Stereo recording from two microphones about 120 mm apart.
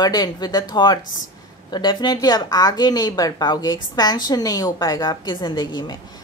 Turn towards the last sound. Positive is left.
turn(degrees=35)  # may be behind; listen again after turning